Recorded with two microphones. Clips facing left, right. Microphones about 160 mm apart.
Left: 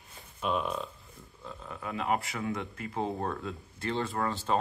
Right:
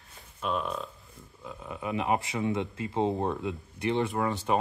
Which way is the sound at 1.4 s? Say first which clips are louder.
Right 4 dB; 10° right (ahead or behind).